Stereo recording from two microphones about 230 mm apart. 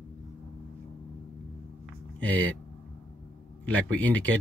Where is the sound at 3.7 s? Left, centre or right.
Right.